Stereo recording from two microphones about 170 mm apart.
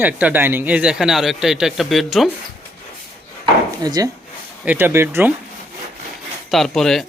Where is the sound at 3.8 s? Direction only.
25° right (ahead or behind).